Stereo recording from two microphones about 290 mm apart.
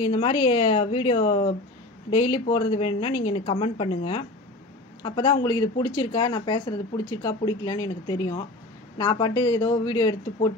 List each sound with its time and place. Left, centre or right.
0.0 s speech: centre